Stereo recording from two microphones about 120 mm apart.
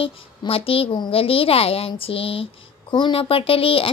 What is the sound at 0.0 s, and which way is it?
A child's voice, 50° left (ahead or behind).